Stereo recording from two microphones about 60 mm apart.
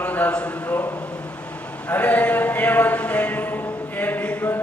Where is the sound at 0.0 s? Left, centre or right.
Left.